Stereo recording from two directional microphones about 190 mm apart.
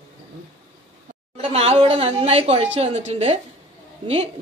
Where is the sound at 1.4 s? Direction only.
30° right (ahead or behind).